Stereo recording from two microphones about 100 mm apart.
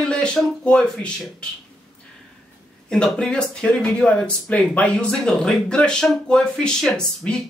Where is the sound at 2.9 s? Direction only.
5° left (ahead or behind).